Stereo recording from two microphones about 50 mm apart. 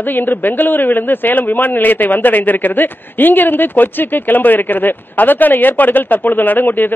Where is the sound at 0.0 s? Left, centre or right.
Left.